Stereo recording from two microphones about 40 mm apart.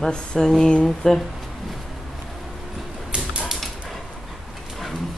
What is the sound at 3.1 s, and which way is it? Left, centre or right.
Typewriter, right.